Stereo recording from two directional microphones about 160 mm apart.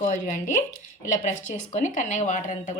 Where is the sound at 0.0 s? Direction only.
55° left (ahead or behind).